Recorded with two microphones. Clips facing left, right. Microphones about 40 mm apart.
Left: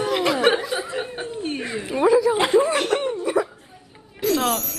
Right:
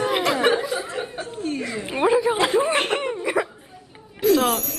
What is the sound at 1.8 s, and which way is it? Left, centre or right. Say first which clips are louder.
Speech: left 2 dB; right.